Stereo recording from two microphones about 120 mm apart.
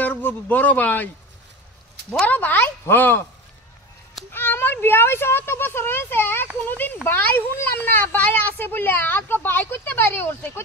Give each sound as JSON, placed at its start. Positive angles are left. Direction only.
{"t": 0.0, "sound": "a child's voice", "side_deg": 15}
{"t": 4.3, "sound": "a child's voice", "side_deg": 20}